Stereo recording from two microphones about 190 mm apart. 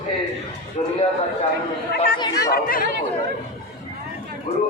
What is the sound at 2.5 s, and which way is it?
Speech, 50° left (ahead or behind).